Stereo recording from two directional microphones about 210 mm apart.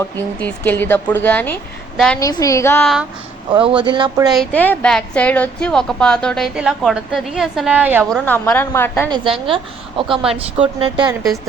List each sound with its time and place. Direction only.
0.2 s a woman's voice: 5° left (ahead or behind)
3.5 s speech: 25° right (ahead or behind)
4.3 s a woman's voice: 5° left (ahead or behind)
8.1 s a woman's voice: 10° left (ahead or behind)
9.0 s speech: 20° right (ahead or behind)
10.6 s speech: 25° right (ahead or behind)